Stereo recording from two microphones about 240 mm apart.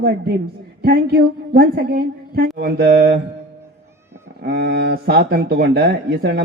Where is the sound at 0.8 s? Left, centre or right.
Right.